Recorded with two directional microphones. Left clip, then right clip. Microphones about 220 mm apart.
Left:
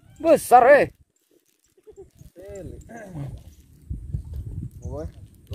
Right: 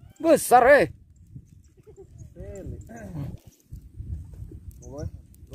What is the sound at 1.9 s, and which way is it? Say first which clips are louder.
Sheep: left 4 dB; 15° left (ahead or behind).